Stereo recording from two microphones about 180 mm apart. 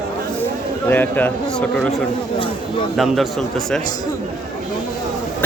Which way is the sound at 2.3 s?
30° left (ahead or behind).